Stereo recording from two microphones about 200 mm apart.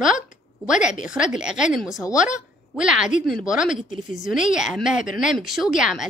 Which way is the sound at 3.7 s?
40° left (ahead or behind).